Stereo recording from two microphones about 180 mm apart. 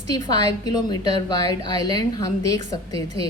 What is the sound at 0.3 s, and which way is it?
A woman's voice, 20° left (ahead or behind).